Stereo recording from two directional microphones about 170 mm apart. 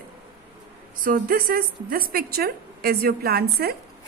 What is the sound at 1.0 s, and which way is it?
A woman's voice, 60° right (ahead or behind).